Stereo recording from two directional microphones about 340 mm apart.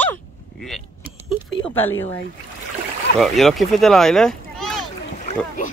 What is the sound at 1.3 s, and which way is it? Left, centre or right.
Speech, centre.